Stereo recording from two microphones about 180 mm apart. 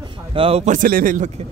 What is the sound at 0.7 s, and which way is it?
Speech, 50° right (ahead or behind).